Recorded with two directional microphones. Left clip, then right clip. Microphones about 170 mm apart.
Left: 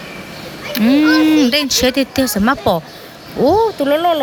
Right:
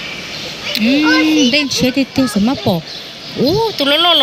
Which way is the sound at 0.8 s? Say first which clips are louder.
Left 1 dB; 40° left (ahead or behind).